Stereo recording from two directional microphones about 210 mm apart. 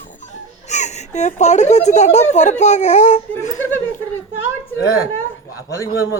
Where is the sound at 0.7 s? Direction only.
35° left (ahead or behind).